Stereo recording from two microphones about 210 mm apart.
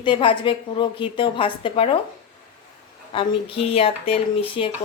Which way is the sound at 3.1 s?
25° left (ahead or behind).